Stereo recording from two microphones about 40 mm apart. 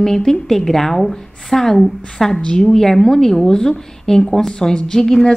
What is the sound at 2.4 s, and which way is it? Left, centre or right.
Speech, left.